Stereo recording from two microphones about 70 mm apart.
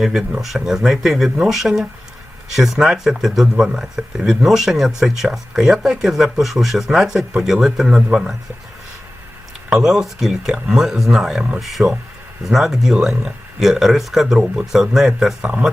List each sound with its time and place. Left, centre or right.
0.0 s speech: centre
9.6 s speech: centre
15.4 s speech: centre